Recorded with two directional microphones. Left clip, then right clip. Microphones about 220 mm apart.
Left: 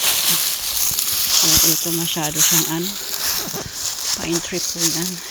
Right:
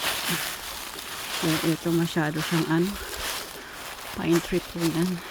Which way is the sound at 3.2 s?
55° left (ahead or behind).